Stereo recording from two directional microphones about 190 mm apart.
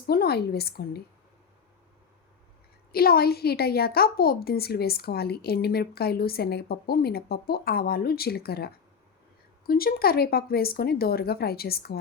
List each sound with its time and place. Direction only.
0.1 s a woman's voice: 55° left (ahead or behind)
2.9 s a woman's voice: 50° left (ahead or behind)